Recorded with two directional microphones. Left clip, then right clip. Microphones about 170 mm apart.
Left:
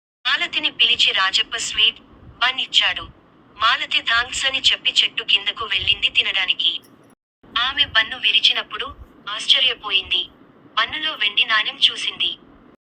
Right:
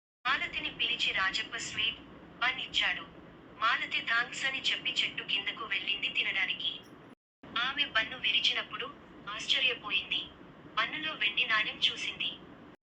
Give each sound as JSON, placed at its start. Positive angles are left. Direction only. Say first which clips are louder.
{"t": 0.2, "sound": "a woman's voice", "louder": "left 12 dB", "side_deg": 35}